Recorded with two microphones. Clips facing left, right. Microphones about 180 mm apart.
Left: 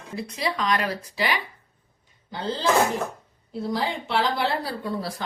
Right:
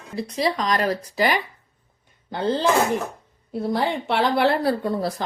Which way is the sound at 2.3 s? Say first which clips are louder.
Right 3 dB; 60° right (ahead or behind).